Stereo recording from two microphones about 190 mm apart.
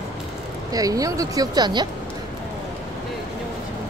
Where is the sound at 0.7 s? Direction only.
20° right (ahead or behind).